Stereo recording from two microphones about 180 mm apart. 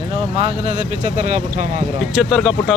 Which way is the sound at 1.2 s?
45° right (ahead or behind).